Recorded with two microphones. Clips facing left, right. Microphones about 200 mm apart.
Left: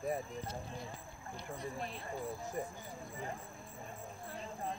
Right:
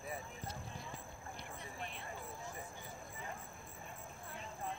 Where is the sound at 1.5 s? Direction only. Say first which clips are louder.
Left 9 dB; 35° left (ahead or behind).